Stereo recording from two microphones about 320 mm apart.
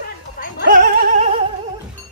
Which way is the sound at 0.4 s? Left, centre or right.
Left.